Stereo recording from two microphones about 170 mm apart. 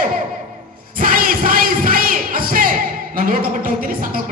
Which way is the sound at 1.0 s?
55° right (ahead or behind).